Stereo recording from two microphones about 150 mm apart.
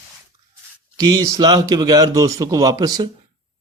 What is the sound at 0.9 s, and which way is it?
Speech, 25° right (ahead or behind).